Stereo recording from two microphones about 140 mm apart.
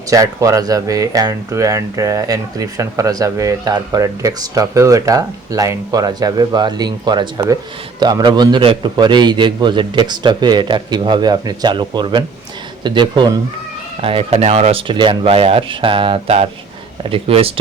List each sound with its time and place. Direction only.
0.1 s a man's voice: 25° right (ahead or behind); by 17.5 s 45° right (ahead or behind)